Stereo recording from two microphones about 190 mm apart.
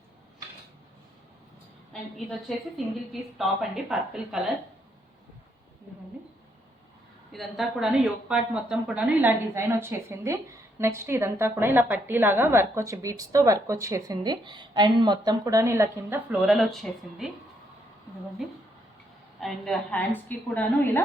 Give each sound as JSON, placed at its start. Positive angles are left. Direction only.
{"t": 2.7, "sound": "a woman's voice", "side_deg": 0}
{"t": 7.3, "sound": "a woman's voice", "side_deg": 0}
{"t": 19.4, "sound": "a woman's voice", "side_deg": 0}